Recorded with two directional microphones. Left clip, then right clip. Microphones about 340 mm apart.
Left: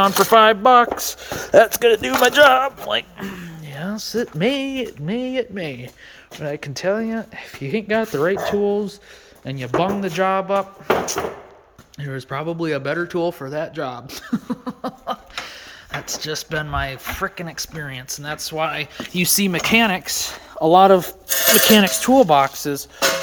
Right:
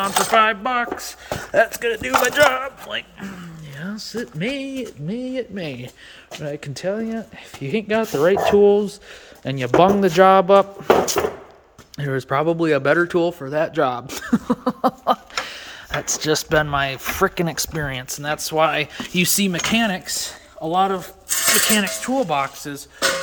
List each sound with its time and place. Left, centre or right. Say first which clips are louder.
0.0 s coin: left 4 dB; centre
3.8 s speech: left 5 dB; centre
17.2 s speech: right 9 dB; right; by 20.3 s centre
20.7 s coin: left 7 dB; centre